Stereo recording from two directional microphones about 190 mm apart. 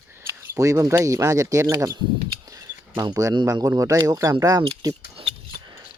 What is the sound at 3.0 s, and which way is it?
Speech, 15° right (ahead or behind).